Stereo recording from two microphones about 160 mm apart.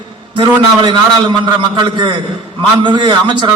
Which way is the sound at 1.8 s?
30° right (ahead or behind).